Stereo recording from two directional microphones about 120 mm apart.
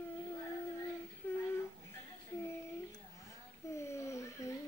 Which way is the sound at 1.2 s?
15° left (ahead or behind).